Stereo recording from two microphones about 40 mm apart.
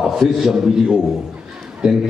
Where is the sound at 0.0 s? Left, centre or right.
Centre.